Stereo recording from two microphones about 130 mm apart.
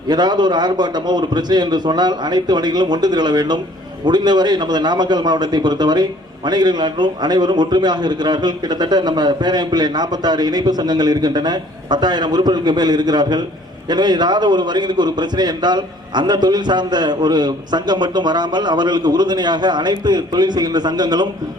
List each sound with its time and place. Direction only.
0.1 s a man's voice: 35° right (ahead or behind)